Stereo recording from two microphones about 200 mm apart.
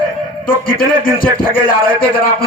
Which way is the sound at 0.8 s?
45° left (ahead or behind).